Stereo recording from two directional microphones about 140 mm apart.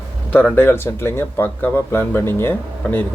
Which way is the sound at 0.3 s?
10° left (ahead or behind).